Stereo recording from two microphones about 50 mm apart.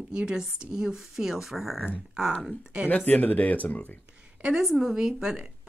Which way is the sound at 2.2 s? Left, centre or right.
Centre.